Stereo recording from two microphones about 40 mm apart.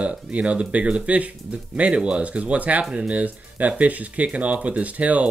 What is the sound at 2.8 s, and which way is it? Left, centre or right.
Speech, right.